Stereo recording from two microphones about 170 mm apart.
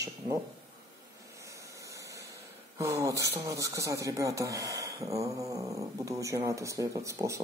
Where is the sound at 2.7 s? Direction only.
20° right (ahead or behind).